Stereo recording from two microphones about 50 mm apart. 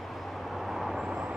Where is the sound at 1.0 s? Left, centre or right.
Right.